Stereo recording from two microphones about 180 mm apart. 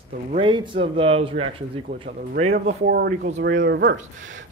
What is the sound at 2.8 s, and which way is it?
Speech, 65° right (ahead or behind).